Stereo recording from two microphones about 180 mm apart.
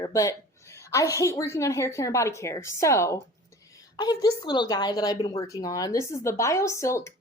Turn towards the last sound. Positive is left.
turn(degrees=15)  # may be behind; listen again after turning